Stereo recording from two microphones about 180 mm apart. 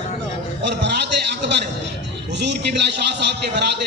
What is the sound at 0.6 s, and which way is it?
Speech, 65° right (ahead or behind).